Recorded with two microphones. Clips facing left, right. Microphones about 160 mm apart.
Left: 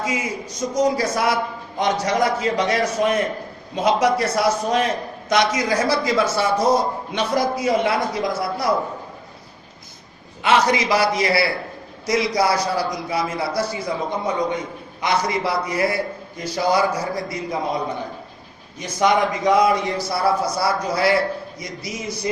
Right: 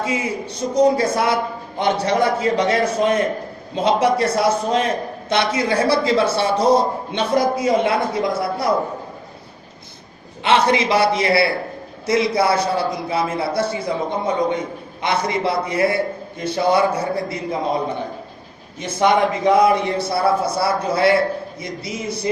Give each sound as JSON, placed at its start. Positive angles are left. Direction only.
{"t": 0.0, "sound": "a man's voice", "side_deg": -30}
{"t": 10.4, "sound": "a man's voice", "side_deg": -30}